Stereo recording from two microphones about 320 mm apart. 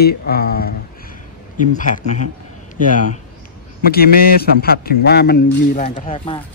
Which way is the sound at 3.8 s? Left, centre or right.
Left.